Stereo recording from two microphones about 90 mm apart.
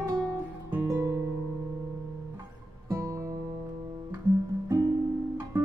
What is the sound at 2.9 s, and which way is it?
Music, 35° right (ahead or behind).